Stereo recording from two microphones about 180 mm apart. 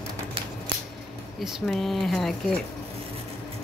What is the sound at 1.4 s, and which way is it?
Speech, centre (ahead or behind).